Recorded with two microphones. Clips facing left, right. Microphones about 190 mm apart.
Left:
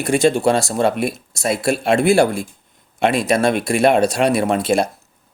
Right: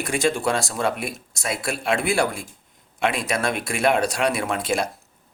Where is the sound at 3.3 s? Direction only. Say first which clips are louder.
Left 8 dB; 25° left (ahead or behind).